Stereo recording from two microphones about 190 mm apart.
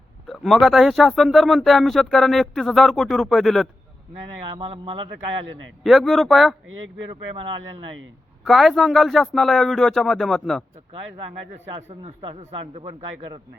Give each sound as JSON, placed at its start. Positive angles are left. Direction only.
{"t": 0.3, "sound": "speech", "side_deg": 0}
{"t": 4.4, "sound": "speech", "side_deg": -25}
{"t": 5.8, "sound": "speech", "side_deg": 0}
{"t": 6.7, "sound": "speech", "side_deg": -90}
{"t": 8.4, "sound": "speech", "side_deg": 0}
{"t": 11.8, "sound": "a man's voice", "side_deg": -30}